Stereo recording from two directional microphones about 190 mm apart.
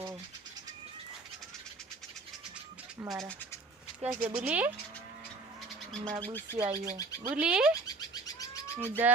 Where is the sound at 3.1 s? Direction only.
Centre (ahead or behind).